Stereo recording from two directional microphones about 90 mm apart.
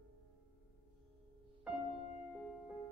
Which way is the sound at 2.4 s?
Centre (ahead or behind).